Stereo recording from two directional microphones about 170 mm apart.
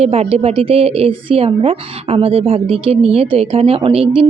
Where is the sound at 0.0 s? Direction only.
35° right (ahead or behind).